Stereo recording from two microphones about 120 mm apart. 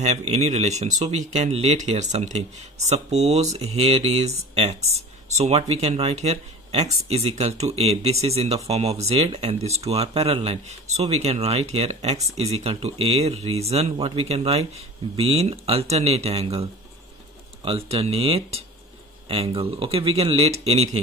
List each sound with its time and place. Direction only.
0.0 s speech: 70° right (ahead or behind)
17.6 s speech: 50° right (ahead or behind)